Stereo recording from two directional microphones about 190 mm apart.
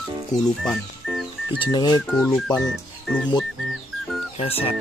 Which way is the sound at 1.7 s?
20° left (ahead or behind).